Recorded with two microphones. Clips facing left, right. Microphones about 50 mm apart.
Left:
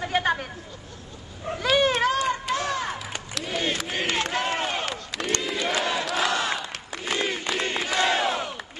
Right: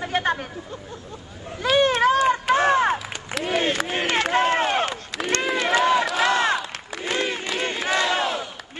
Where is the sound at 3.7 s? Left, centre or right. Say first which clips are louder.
Right 4 dB; centre.